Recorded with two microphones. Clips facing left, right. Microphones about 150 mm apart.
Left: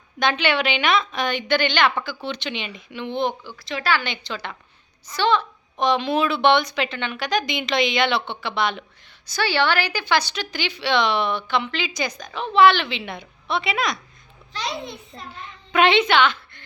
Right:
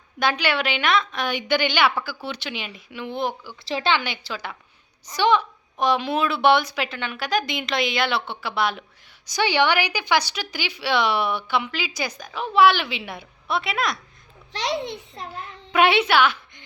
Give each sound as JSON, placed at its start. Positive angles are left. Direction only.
{"t": 0.2, "sound": "a woman's voice", "side_deg": -5}
{"t": 3.7, "sound": "a woman's voice", "side_deg": -30}
{"t": 3.9, "sound": "a woman's voice", "side_deg": -10}
{"t": 9.2, "sound": "a woman's voice", "side_deg": -15}
{"t": 14.5, "sound": "a child's voice", "side_deg": -75}
{"t": 15.4, "sound": "a child's voice", "side_deg": -5}